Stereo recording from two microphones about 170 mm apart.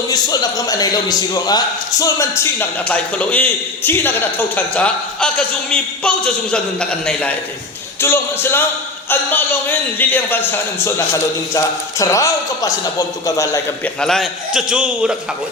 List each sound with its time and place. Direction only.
0.1 s a man's voice: 20° left (ahead or behind)
14.0 s a man's voice: centre (ahead or behind)